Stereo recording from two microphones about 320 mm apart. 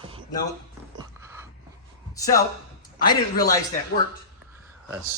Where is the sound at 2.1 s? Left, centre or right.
Centre.